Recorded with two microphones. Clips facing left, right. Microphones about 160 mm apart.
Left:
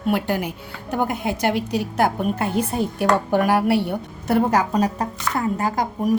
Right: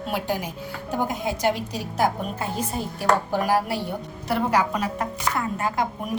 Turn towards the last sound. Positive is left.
turn(degrees=40)  # may be behind; listen again after turning